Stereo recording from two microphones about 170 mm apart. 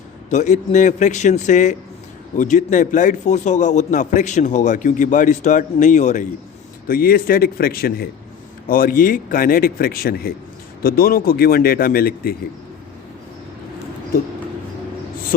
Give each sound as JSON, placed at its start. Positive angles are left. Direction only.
{"t": 0.3, "sound": "a man's voice", "side_deg": 45}
{"t": 6.8, "sound": "a man's voice", "side_deg": 60}